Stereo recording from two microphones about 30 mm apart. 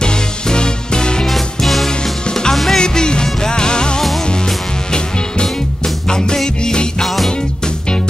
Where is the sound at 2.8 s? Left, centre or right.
Left.